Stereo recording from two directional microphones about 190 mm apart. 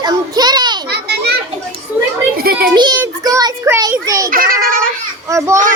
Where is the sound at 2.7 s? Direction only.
25° right (ahead or behind).